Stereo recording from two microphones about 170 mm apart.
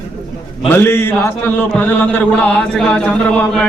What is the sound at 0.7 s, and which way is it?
A man's voice, 15° left (ahead or behind).